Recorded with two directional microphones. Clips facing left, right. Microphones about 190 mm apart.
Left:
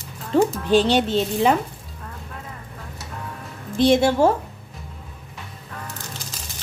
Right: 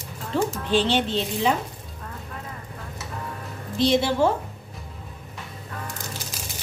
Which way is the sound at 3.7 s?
50° left (ahead or behind).